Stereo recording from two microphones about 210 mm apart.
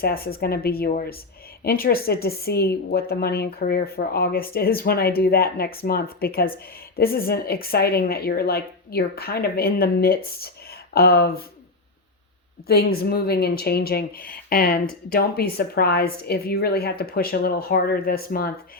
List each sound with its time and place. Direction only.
0.0 s a woman's voice: 45° left (ahead or behind)
12.6 s a woman's voice: 50° left (ahead or behind)